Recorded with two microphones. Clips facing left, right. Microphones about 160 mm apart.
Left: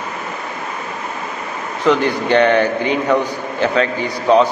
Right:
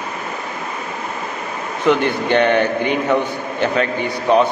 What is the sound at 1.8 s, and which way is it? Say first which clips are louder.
Speech: left 1 dB; 15° right (ahead or behind).